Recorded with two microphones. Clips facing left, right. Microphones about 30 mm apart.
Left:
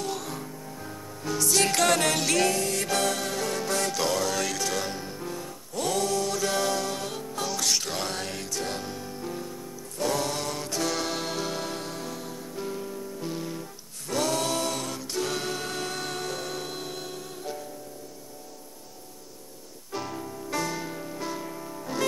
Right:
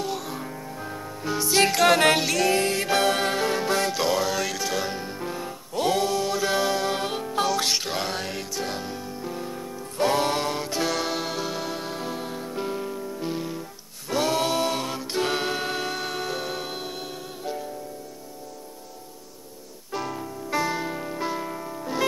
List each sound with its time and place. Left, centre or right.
0.0 s music: centre
0.4 s music: right
1.7 s music: centre
2.0 s music: right
2.2 s music: centre
2.5 s music: right
6.9 s music: right; by 9.5 s centre
9.5 s music: right; by 11.9 s centre
11.9 s music: right
19.9 s music: centre